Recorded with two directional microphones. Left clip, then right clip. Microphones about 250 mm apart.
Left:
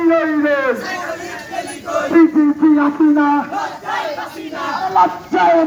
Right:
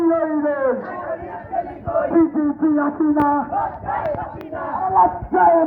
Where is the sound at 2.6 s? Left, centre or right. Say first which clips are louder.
Left 4 dB; left.